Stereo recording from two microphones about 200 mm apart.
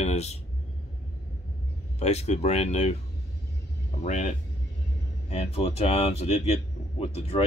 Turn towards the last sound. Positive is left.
turn(degrees=30)  # may be behind; listen again after turning